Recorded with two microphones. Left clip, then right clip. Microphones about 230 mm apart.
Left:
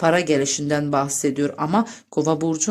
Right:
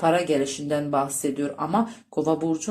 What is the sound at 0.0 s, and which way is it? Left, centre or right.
Speech, left.